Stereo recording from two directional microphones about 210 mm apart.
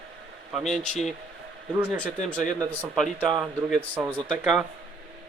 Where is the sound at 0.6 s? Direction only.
Centre (ahead or behind).